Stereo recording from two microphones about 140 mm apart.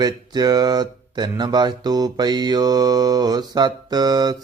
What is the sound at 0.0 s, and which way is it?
Speech, 30° right (ahead or behind).